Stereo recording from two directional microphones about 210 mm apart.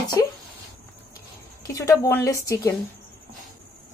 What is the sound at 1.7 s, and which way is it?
A woman's voice, 15° left (ahead or behind).